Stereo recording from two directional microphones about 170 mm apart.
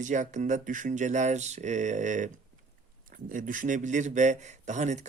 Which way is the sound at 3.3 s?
50° right (ahead or behind).